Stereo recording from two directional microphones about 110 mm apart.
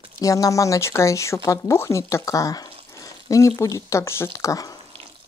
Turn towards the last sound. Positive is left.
turn(degrees=30)  # may be behind; listen again after turning